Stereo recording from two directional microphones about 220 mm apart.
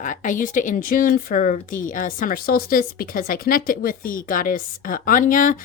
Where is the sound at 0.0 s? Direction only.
35° left (ahead or behind).